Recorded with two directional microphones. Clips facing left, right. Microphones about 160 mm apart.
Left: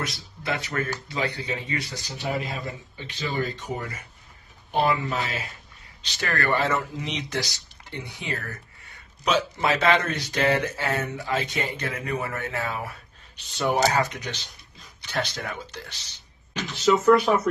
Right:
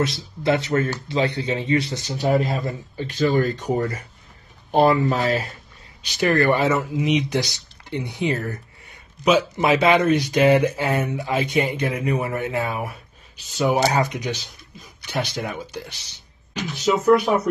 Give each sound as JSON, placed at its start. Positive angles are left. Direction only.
{"t": 0.0, "sound": "speech", "side_deg": -25}
{"t": 2.1, "sound": "speech", "side_deg": -40}
{"t": 6.0, "sound": "speech", "side_deg": -15}